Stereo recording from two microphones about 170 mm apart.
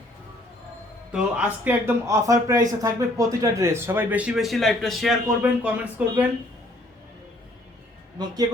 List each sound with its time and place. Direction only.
1.1 s a man's voice: 5° right (ahead or behind)
2.0 s a man's voice: 20° right (ahead or behind)
8.2 s speech: 25° right (ahead or behind)